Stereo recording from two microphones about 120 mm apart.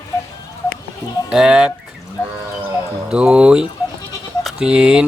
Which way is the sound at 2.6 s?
10° right (ahead or behind).